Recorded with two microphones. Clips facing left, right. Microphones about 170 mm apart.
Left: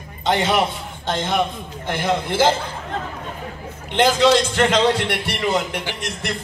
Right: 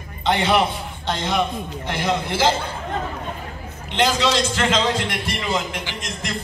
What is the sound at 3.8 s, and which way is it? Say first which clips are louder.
A man's voice: left 5 dB; 55° left (ahead or behind).